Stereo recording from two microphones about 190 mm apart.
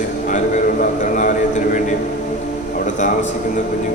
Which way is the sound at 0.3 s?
40° left (ahead or behind).